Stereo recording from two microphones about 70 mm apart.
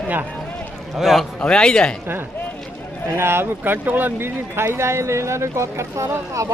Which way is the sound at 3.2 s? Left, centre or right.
Right.